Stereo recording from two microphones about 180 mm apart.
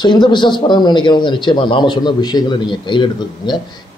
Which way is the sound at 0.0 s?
25° left (ahead or behind).